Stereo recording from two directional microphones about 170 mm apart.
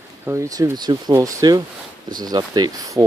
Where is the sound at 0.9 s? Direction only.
25° right (ahead or behind).